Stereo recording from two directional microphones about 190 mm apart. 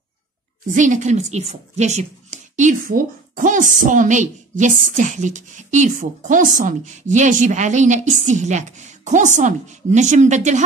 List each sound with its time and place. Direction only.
0.7 s speech: 40° right (ahead or behind)